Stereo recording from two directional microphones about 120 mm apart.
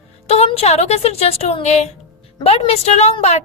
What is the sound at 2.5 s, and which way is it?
Speech, 55° left (ahead or behind).